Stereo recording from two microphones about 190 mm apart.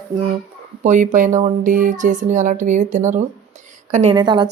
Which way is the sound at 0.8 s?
40° right (ahead or behind).